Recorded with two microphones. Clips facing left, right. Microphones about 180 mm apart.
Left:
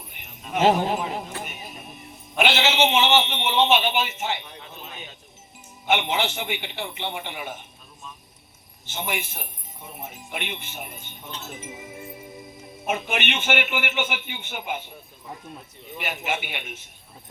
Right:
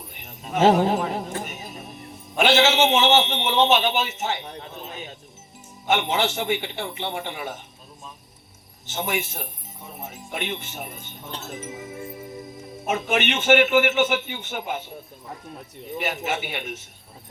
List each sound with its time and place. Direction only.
0.3 s jingle bell: 40° right (ahead or behind)
0.9 s music: 45° right (ahead or behind)
2.4 s a man's voice: 45° right (ahead or behind)
8.9 s a man's voice: 40° right (ahead or behind)
12.9 s a man's voice: 40° right (ahead or behind)
16.1 s a man's voice: 40° right (ahead or behind)